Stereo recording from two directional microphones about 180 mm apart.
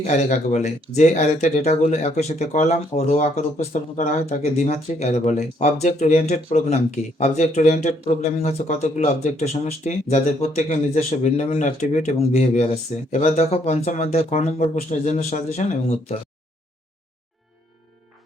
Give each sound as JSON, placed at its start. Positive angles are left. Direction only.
{"t": 0.0, "sound": "speech", "side_deg": 40}